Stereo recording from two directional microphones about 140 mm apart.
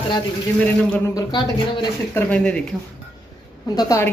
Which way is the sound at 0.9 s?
20° left (ahead or behind).